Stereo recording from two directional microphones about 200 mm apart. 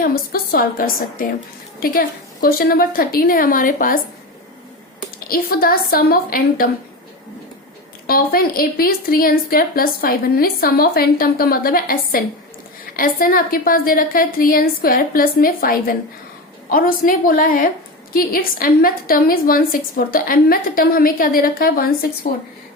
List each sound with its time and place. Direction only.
0.0 s a woman's voice: 50° left (ahead or behind)
8.0 s a woman's voice: 50° left (ahead or behind)